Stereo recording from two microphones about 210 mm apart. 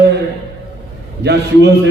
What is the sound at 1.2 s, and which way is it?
Speech, 55° right (ahead or behind).